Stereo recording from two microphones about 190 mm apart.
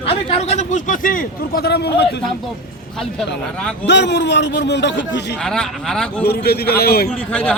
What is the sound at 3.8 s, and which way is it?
A man's voice, 65° left (ahead or behind).